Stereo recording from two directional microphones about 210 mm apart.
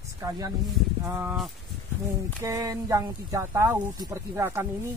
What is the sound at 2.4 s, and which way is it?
Speech, 15° right (ahead or behind).